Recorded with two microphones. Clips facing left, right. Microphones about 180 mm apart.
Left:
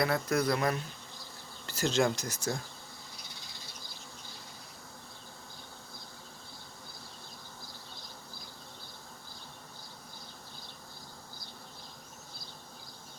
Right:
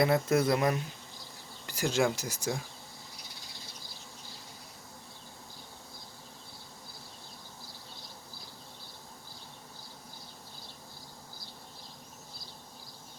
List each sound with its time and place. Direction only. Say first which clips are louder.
0.0 s speech: right 3 dB; 25° right (ahead or behind)